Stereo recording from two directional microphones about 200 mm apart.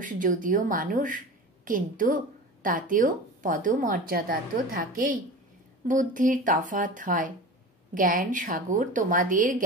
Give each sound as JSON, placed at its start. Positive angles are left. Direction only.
{"t": 0.0, "sound": "a woman's voice", "side_deg": -40}